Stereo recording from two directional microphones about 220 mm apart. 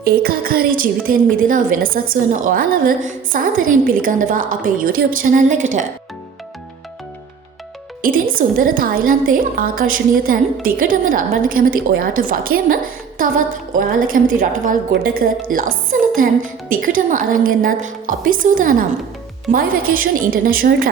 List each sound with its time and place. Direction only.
0.0 s a woman's voice: 40° right (ahead or behind)
8.0 s a woman's voice: 40° right (ahead or behind)